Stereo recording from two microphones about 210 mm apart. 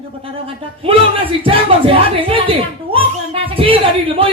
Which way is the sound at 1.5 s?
25° right (ahead or behind).